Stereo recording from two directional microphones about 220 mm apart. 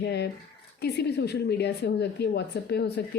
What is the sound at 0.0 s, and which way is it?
A woman's voice, 50° left (ahead or behind).